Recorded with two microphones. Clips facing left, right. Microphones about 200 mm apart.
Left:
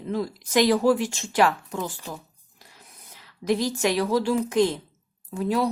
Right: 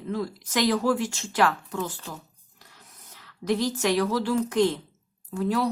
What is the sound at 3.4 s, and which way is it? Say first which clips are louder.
Speech: left 2 dB; 10° left (ahead or behind).